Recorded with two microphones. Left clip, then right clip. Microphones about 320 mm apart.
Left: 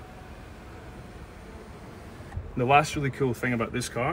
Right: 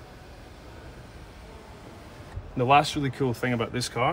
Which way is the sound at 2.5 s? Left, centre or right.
Right.